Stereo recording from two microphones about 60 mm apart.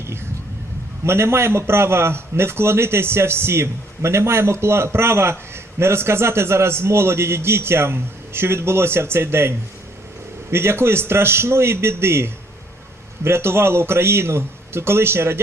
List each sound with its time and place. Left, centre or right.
1.0 s a man's voice: right